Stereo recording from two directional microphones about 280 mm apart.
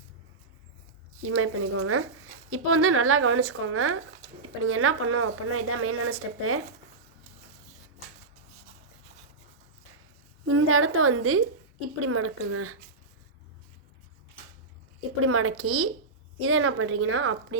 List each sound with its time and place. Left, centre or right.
1.2 s a woman's voice: right
10.4 s a woman's voice: right
15.2 s a woman's voice: right